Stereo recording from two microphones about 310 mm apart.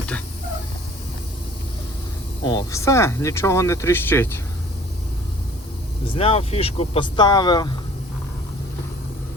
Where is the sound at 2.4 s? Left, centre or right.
Centre.